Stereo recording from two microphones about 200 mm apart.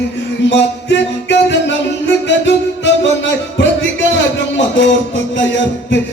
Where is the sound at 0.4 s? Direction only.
60° left (ahead or behind).